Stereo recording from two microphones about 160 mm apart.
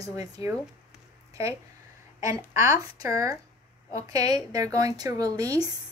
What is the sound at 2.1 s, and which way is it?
Speech, 20° right (ahead or behind).